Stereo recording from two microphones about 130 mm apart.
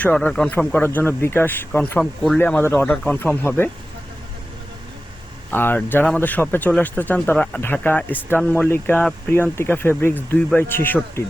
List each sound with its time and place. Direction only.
0.0 s speech: 10° left (ahead or behind)
2.0 s speech: centre (ahead or behind)
2.4 s speech: 15° left (ahead or behind)
5.5 s speech: 15° left (ahead or behind)